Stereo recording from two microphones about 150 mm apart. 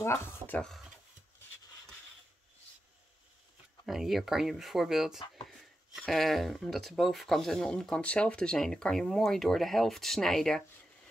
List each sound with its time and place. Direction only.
0.0 s speech: 15° left (ahead or behind)
0.6 s speech: centre (ahead or behind)
3.8 s speech: centre (ahead or behind)